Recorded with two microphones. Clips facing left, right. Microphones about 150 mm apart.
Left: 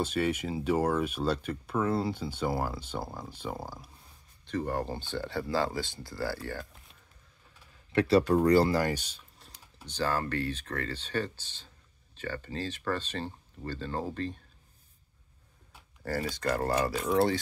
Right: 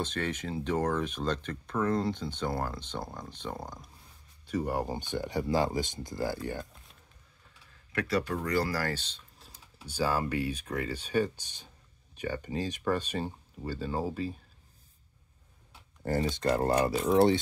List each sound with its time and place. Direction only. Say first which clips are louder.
0.0 s speech: left 4 dB; 10° left (ahead or behind)
4.5 s speech: right 1 dB; 10° right (ahead or behind)
7.9 s speech: left 7 dB; 30° left (ahead or behind); by 9.2 s 10° left (ahead or behind)
9.4 s typing: even; centre (ahead or behind)
9.8 s speech: right 1 dB; 10° right (ahead or behind)
16.0 s speech: right 3 dB; 20° right (ahead or behind)